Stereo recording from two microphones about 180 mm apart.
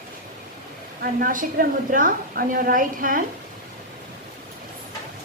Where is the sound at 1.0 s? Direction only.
50° right (ahead or behind).